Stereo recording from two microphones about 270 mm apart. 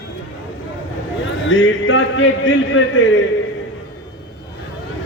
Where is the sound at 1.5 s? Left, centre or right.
Left.